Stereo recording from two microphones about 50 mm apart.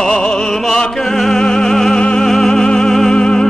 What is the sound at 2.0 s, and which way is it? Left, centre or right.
Music, centre.